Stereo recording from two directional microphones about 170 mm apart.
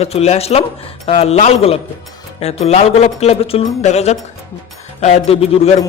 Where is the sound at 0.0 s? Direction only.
35° left (ahead or behind).